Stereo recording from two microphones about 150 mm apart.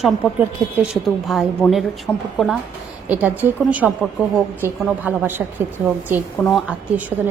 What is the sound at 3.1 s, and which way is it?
A woman's voice, 10° right (ahead or behind).